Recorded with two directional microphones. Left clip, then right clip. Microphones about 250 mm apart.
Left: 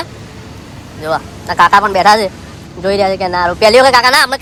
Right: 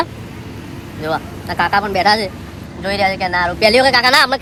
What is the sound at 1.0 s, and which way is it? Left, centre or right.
Speech, centre.